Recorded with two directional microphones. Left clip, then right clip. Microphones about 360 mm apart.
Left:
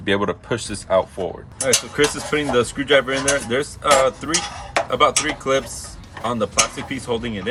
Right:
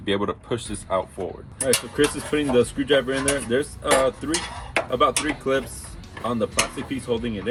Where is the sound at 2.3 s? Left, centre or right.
Left.